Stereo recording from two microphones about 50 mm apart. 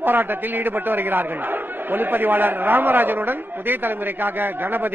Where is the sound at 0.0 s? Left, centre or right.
Right.